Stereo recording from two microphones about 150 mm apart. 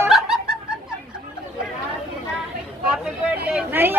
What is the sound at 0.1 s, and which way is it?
Music, centre (ahead or behind).